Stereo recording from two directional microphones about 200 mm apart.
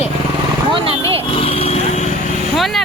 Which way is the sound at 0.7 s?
25° right (ahead or behind).